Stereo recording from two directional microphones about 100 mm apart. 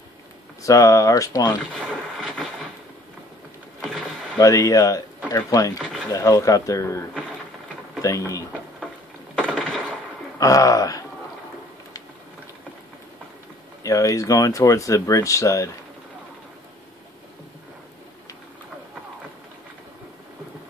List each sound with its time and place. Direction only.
0.6 s speech: 35° left (ahead or behind)
2.1 s a sound: centre (ahead or behind)
4.4 s speech: 35° left (ahead or behind)
9.6 s a sound: 10° left (ahead or behind)
10.4 s speech: 35° left (ahead or behind)
13.8 s speech: 35° left (ahead or behind)